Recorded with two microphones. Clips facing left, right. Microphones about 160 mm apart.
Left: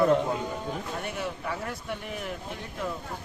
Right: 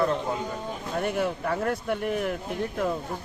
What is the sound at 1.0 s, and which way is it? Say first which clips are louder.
Speech: right 7 dB; 55° right (ahead or behind).